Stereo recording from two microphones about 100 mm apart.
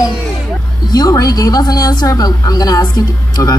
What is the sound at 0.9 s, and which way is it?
A woman's voice, 40° left (ahead or behind).